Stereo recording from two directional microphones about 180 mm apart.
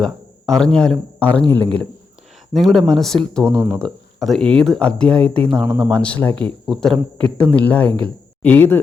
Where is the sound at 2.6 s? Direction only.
Centre (ahead or behind).